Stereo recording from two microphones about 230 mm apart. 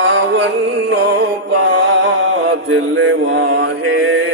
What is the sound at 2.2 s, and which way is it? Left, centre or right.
Chant, right.